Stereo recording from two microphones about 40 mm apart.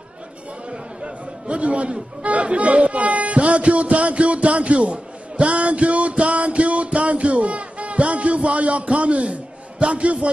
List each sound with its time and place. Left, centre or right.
0.7 s chatter: right